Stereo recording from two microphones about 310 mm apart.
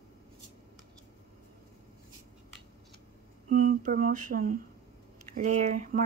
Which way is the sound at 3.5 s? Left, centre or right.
Right.